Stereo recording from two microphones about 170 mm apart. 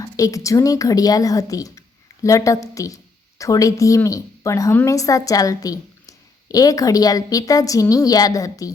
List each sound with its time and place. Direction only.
0.0 s a woman's voice: 20° left (ahead or behind)